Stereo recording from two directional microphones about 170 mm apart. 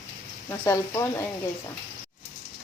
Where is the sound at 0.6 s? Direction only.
15° left (ahead or behind).